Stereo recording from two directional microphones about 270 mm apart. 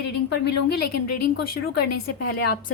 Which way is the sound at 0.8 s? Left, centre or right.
Left.